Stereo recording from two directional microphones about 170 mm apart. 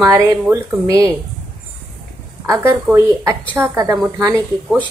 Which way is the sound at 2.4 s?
20° right (ahead or behind).